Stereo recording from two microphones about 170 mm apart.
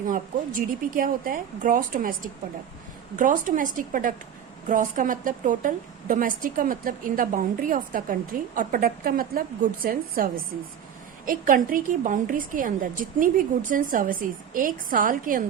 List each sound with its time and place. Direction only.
0.0 s a woman's voice: 50° right (ahead or behind)
11.3 s a woman's voice: 55° right (ahead or behind)